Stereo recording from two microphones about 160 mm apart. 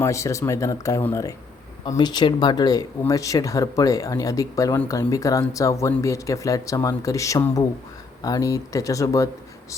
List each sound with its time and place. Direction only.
0.0 s speech: 20° left (ahead or behind)